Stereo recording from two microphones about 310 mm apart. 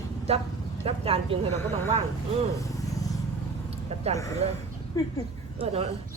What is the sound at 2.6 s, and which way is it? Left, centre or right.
Vehicle, centre.